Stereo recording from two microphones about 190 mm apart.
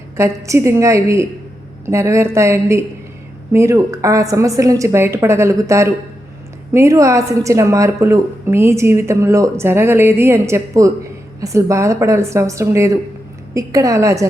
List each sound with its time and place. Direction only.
0.2 s speech: 15° right (ahead or behind)